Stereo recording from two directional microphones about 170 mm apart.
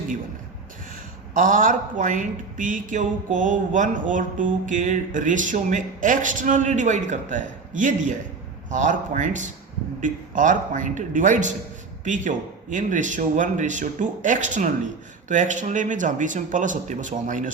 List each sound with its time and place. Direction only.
1.3 s speech: 50° right (ahead or behind)